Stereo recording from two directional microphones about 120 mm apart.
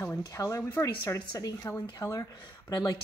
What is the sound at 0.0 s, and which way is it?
A woman's voice, 20° left (ahead or behind).